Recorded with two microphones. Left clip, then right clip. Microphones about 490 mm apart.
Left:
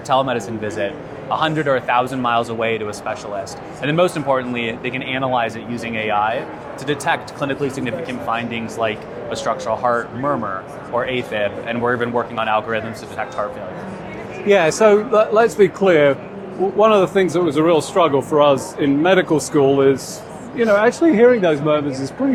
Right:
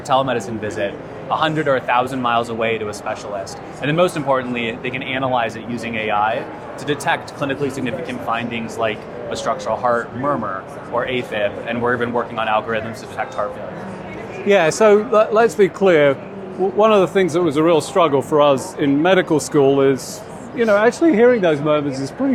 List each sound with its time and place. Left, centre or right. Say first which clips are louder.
0.1 s speech: even; left
14.4 s speech: even; right